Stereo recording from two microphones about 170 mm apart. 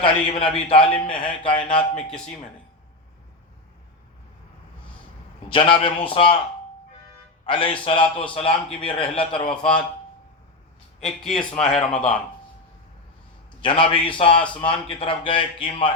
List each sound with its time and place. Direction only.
0.0 s a man's voice: 30° left (ahead or behind)
2.0 s speech: 5° left (ahead or behind)
5.5 s a man's voice: 30° left (ahead or behind)
7.4 s a man's voice: 30° left (ahead or behind)
11.0 s speech: 5° left (ahead or behind)
13.6 s a man's voice: 30° left (ahead or behind)